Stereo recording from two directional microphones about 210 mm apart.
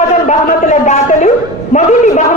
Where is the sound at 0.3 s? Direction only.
35° left (ahead or behind).